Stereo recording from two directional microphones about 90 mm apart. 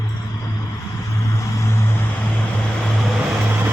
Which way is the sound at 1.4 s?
35° left (ahead or behind).